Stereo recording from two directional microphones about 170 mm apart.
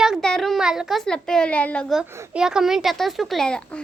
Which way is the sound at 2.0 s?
15° right (ahead or behind).